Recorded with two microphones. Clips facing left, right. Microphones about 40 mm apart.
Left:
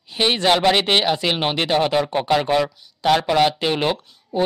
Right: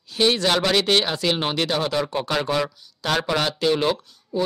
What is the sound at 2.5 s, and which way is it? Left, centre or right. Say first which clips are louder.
Speech: left 4 dB; centre.